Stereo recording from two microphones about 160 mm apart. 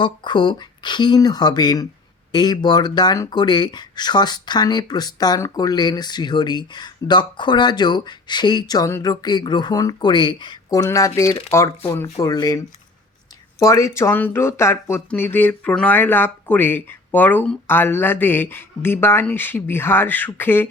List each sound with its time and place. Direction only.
0.0 s speech: 30° left (ahead or behind); by 20.7 s 15° left (ahead or behind)